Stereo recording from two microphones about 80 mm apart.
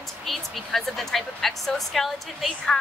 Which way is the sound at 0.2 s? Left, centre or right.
Centre.